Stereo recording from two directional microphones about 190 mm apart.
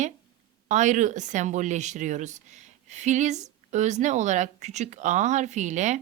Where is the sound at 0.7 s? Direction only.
40° right (ahead or behind).